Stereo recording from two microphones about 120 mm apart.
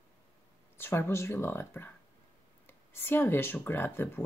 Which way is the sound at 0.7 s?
20° left (ahead or behind).